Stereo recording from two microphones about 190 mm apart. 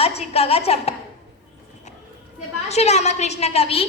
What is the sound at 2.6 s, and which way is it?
A woman's voice, 35° left (ahead or behind).